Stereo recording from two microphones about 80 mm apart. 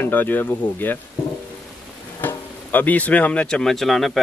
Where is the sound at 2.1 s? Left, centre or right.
Left.